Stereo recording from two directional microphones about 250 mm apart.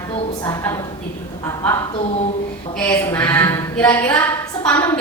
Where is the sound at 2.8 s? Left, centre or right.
Centre.